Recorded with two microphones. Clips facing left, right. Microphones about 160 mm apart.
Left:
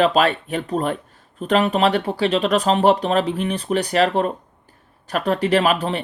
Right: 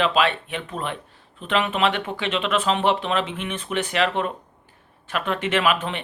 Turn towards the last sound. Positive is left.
turn(degrees=35)  # may be behind; listen again after turning